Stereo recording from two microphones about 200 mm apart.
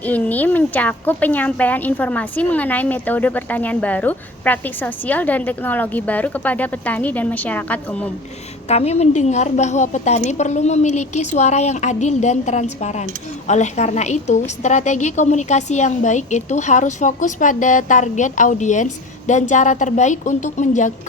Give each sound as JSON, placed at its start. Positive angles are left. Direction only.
{"t": 0.0, "sound": "a woman's voice", "side_deg": 10}
{"t": 8.6, "sound": "a woman's voice", "side_deg": 30}